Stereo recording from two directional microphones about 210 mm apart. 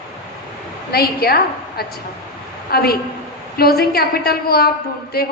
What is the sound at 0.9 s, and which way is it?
A man's voice, 45° left (ahead or behind).